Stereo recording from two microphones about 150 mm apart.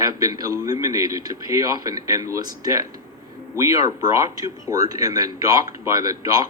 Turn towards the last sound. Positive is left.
turn(degrees=-25)  # may be behind; listen again after turning